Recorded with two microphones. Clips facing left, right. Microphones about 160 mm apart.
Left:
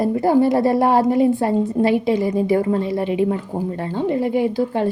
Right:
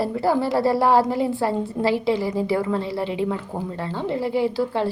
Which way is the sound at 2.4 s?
45° left (ahead or behind).